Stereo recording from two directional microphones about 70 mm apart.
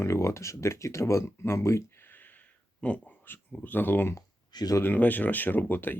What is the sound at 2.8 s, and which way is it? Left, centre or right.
Speech, centre.